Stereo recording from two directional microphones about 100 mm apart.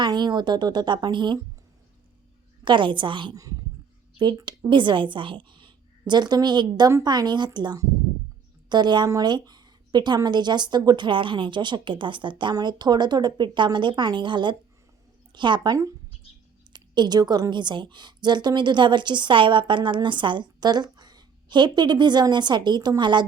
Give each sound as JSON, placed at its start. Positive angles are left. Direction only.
{"t": 0.0, "sound": "a woman's voice", "side_deg": -45}
{"t": 2.6, "sound": "a woman's voice", "side_deg": -55}
{"t": 3.3, "sound": "speech", "side_deg": -35}
{"t": 4.2, "sound": "a woman's voice", "side_deg": -50}